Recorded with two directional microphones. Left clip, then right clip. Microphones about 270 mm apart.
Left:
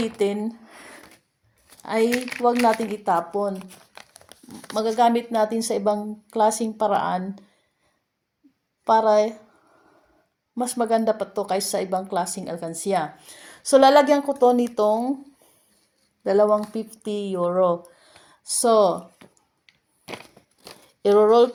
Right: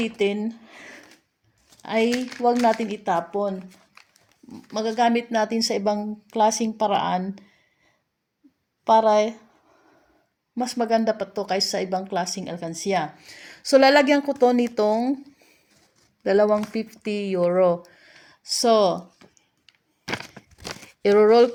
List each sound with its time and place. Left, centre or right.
0.2 s a woman's voice: right
4.7 s a woman's voice: right
10.5 s a woman's voice: right
16.2 s speech: right
17.2 s a woman's voice: centre
18.4 s speech: right
20.1 s a sound: right
21.2 s a woman's voice: centre